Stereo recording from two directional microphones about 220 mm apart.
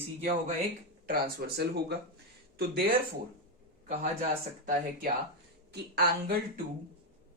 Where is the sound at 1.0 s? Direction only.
45° right (ahead or behind).